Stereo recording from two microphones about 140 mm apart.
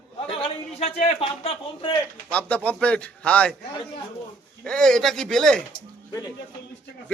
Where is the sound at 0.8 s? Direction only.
50° left (ahead or behind).